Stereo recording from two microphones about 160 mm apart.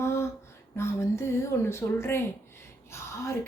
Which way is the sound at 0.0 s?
15° left (ahead or behind).